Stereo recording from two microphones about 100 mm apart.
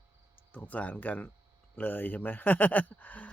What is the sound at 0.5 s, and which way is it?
Speech, 15° left (ahead or behind).